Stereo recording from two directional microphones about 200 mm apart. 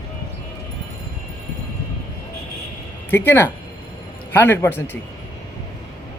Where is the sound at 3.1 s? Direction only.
10° left (ahead or behind).